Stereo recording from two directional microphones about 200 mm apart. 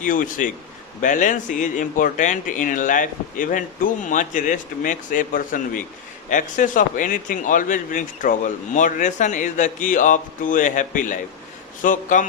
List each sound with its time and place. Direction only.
0.0 s speech: 40° left (ahead or behind)